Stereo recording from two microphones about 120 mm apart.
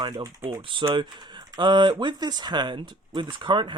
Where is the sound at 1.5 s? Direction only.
40° right (ahead or behind).